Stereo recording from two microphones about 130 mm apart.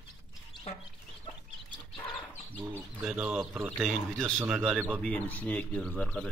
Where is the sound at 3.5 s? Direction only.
20° right (ahead or behind).